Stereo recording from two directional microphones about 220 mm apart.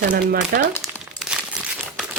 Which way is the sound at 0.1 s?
40° right (ahead or behind).